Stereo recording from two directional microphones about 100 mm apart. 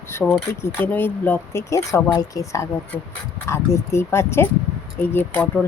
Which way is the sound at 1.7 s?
30° left (ahead or behind).